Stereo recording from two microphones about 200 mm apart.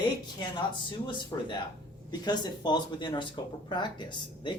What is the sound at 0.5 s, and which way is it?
Speech, 25° left (ahead or behind).